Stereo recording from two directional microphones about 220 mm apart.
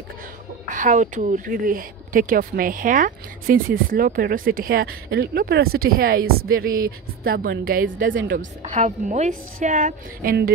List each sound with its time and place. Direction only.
0.7 s speech: 35° right (ahead or behind)